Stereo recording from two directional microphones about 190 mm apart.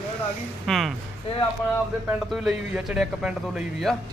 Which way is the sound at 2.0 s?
5° right (ahead or behind).